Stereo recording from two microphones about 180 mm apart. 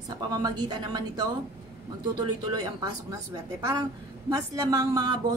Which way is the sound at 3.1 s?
20° right (ahead or behind).